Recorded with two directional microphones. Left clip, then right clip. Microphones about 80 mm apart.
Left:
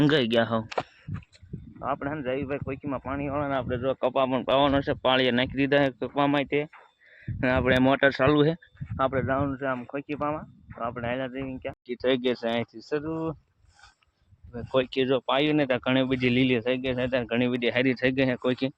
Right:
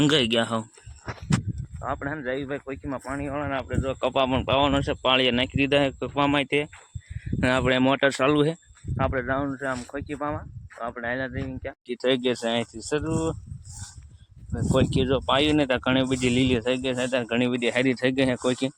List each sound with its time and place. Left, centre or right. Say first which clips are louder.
0.0 s a man's voice: right 1 dB; centre
1.8 s a man's voice: even; right
6.1 s speech: right 2 dB; right
7.3 s a sound: right 2 dB; right
7.7 s a man's voice: left 2 dB; centre
9.2 s speech: even; right
12.8 s speech: right 3 dB; right
14.5 s a man's voice: right 2 dB; right
15.3 s speech: right 2 dB; right
16.6 s speech: right 1 dB; right
18.4 s speech: right 2 dB; right